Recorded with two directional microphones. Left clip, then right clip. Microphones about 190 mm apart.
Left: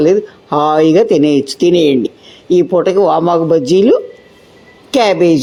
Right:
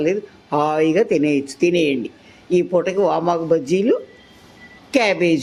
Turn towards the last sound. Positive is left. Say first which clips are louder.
# left 7 dB
turn(degrees=20)  # may be behind; listen again after turning